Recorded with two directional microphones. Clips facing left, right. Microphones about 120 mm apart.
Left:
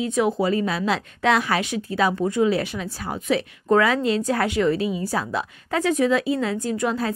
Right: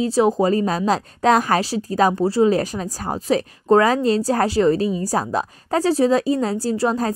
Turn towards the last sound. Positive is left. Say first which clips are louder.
# right 4 dB
turn(degrees=-35)  # may be behind; listen again after turning